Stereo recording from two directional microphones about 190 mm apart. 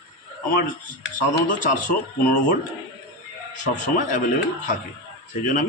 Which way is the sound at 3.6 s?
40° left (ahead or behind).